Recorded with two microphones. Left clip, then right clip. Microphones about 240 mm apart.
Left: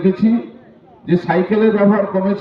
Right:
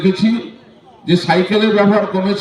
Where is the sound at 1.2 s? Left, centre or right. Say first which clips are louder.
Right 1 dB; right.